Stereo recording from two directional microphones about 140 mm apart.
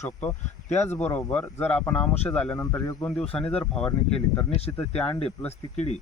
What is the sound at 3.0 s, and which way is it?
Speech, 5° left (ahead or behind).